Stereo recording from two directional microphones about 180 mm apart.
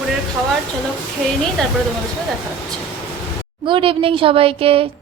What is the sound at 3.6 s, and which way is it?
A woman's voice, 30° right (ahead or behind).